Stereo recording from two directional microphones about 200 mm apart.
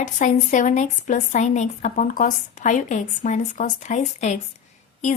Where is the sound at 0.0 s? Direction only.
40° left (ahead or behind).